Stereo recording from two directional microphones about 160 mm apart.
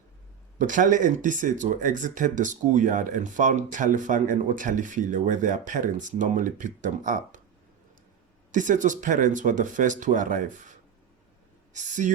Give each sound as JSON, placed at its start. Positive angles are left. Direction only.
{"t": 0.6, "sound": "speech", "side_deg": -55}
{"t": 8.5, "sound": "speech", "side_deg": -55}